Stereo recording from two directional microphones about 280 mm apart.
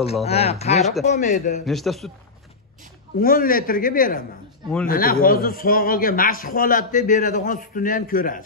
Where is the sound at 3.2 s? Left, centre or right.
Left.